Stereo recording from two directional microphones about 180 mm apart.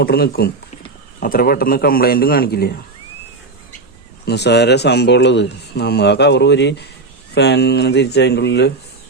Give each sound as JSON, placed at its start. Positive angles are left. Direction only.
{"t": 0.0, "sound": "a man's voice", "side_deg": 60}
{"t": 4.3, "sound": "speech", "side_deg": 70}